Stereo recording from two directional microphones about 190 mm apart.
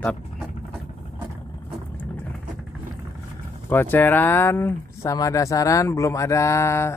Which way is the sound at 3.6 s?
10° left (ahead or behind).